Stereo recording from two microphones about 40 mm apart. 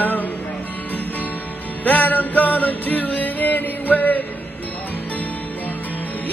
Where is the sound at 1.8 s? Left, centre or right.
Left.